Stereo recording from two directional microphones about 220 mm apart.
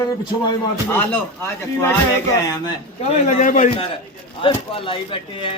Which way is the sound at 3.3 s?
35° left (ahead or behind).